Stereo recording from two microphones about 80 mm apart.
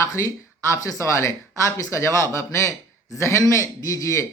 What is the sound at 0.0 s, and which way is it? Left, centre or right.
A man's voice, left.